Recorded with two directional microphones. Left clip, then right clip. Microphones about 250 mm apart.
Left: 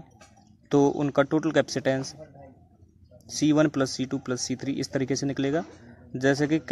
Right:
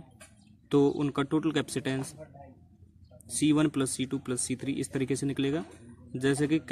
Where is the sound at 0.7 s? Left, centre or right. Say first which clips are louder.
Left 4 dB; centre.